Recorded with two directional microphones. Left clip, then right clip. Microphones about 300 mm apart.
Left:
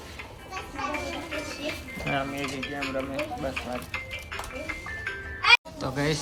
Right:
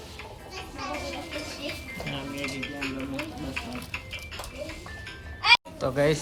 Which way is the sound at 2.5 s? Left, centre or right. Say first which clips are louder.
Left 2 dB; centre.